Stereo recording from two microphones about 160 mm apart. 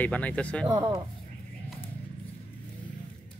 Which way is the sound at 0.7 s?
25° right (ahead or behind).